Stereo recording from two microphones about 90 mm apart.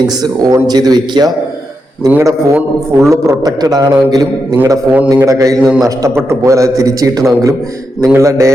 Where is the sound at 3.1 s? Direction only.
35° right (ahead or behind).